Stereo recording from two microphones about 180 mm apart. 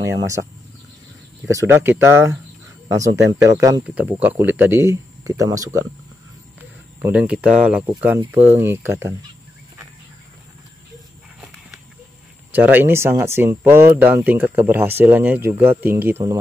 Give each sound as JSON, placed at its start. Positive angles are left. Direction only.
{"t": 1.5, "sound": "speech", "side_deg": -15}
{"t": 7.0, "sound": "speech", "side_deg": -10}
{"t": 12.5, "sound": "speech", "side_deg": -10}